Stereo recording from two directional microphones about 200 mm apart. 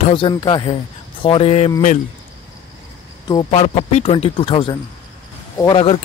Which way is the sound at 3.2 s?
25° left (ahead or behind).